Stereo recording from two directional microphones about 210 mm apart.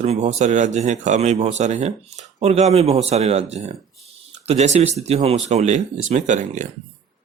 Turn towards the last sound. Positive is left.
turn(degrees=-35)  # may be behind; listen again after turning